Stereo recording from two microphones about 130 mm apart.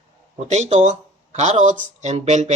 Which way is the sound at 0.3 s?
65° right (ahead or behind).